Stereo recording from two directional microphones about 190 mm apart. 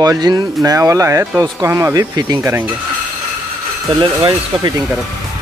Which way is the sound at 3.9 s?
20° right (ahead or behind).